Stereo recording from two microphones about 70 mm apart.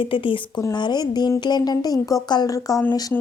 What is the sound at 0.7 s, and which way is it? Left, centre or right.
A woman's voice, left.